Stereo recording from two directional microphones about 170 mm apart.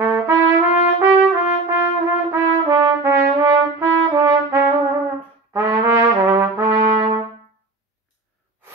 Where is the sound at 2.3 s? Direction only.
15° right (ahead or behind).